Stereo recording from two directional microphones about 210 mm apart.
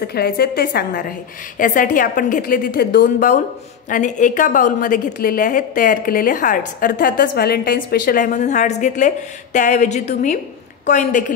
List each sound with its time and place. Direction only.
0.0 s a woman's voice: 50° left (ahead or behind)